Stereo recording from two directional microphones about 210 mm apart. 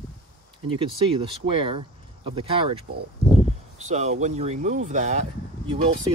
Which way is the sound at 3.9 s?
35° right (ahead or behind).